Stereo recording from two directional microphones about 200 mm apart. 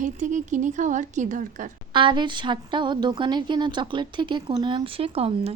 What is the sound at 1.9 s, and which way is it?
A woman's voice, 25° right (ahead or behind).